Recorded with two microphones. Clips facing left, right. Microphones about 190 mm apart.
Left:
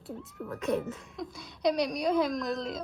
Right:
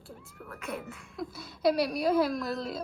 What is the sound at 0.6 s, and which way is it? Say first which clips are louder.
Speech: left 8 dB; 35° left (ahead or behind).